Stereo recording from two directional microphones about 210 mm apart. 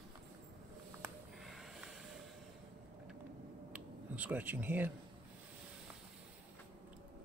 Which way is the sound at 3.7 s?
5° right (ahead or behind).